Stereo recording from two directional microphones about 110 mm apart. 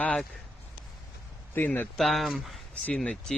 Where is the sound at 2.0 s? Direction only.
Centre (ahead or behind).